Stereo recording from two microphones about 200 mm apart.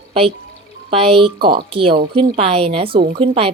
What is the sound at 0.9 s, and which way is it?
Speech, 30° right (ahead or behind).